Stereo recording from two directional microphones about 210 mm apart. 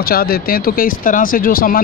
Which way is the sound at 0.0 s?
45° left (ahead or behind).